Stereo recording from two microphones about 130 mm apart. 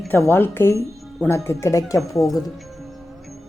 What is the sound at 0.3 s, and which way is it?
A woman's voice, 15° left (ahead or behind).